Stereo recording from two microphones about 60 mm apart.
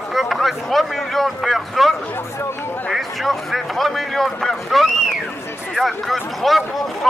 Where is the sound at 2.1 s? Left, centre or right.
Left.